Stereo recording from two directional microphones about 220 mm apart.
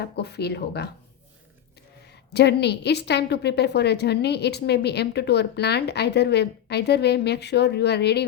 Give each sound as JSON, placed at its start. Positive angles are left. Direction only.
{"t": 0.0, "sound": "a woman's voice", "side_deg": 50}
{"t": 2.3, "sound": "a woman's voice", "side_deg": 50}